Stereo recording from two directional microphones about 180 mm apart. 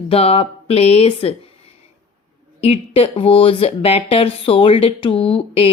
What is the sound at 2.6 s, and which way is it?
Speech, 35° left (ahead or behind).